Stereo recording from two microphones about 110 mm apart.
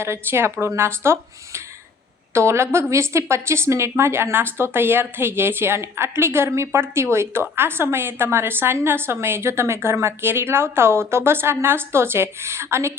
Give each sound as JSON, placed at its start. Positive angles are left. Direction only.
{"t": 0.0, "sound": "a woman's voice", "side_deg": -25}